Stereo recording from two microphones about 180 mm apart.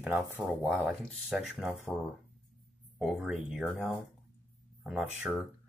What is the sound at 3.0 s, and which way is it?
Speech, centre (ahead or behind).